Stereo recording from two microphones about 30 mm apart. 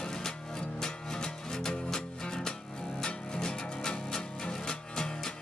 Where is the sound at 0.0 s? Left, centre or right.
Centre.